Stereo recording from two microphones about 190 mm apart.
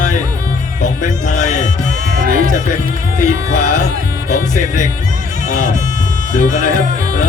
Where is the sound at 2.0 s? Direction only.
50° right (ahead or behind).